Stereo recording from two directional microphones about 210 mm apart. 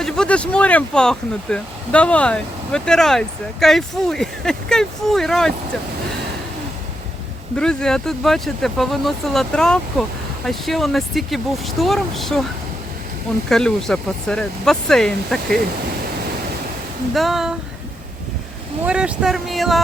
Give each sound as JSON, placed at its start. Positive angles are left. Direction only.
{"t": 0.0, "sound": "speech", "side_deg": 5}
{"t": 7.5, "sound": "speech", "side_deg": 5}
{"t": 13.5, "sound": "speech", "side_deg": 0}
{"t": 17.2, "sound": "speech", "side_deg": 0}
{"t": 18.9, "sound": "speech", "side_deg": -5}